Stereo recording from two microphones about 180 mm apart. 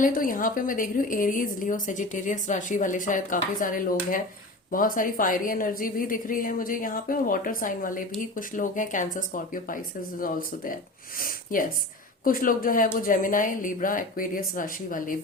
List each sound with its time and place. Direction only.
0.0 s a woman's voice: 50° left (ahead or behind)